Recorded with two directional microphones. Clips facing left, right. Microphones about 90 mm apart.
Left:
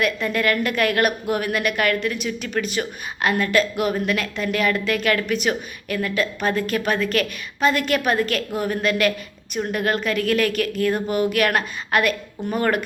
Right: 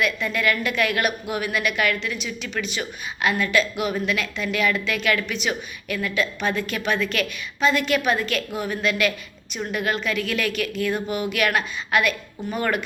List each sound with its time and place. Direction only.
0.3 s a woman's voice: 45° left (ahead or behind)